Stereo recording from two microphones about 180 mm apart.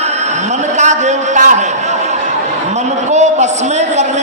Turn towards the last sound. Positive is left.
turn(degrees=-40)  # may be behind; listen again after turning